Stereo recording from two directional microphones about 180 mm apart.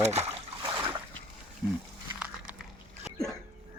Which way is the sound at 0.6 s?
25° right (ahead or behind).